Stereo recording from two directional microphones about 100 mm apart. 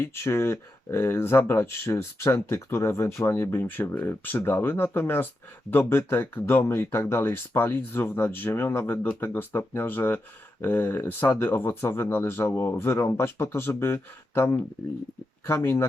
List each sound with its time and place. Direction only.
0.0 s speech: 25° left (ahead or behind)